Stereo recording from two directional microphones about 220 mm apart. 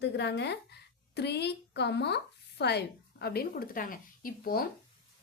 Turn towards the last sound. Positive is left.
turn(degrees=40)  # may be behind; listen again after turning